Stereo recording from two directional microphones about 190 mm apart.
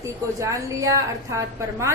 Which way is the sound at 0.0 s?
15° right (ahead or behind).